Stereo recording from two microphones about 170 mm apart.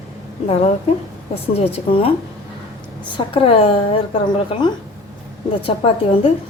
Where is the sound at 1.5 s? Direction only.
35° left (ahead or behind).